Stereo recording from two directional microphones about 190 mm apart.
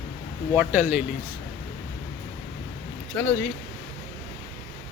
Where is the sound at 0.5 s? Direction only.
10° right (ahead or behind).